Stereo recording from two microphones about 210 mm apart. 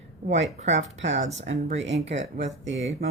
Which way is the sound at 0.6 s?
30° right (ahead or behind).